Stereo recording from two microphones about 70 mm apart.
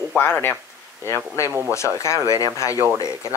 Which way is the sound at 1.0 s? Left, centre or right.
Left.